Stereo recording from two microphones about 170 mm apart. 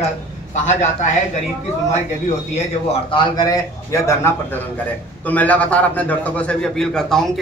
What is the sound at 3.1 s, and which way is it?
A man's voice, 25° left (ahead or behind).